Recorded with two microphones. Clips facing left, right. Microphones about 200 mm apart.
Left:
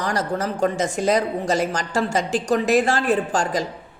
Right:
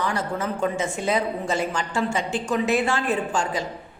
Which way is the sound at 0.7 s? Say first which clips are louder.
Left 3 dB; 90° left.